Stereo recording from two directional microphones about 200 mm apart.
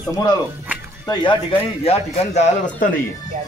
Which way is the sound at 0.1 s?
15° left (ahead or behind).